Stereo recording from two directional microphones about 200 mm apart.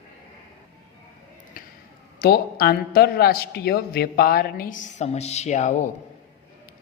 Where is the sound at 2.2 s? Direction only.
50° left (ahead or behind).